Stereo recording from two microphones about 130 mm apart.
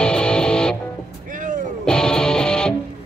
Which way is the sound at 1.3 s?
90° right.